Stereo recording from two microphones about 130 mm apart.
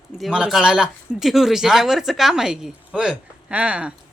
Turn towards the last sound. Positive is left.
turn(degrees=-10)  # may be behind; listen again after turning